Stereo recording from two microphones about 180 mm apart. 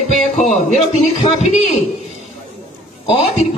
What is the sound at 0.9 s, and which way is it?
Speech, 35° left (ahead or behind).